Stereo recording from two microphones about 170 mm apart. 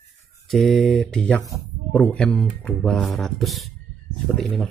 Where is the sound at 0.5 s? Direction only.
Centre (ahead or behind).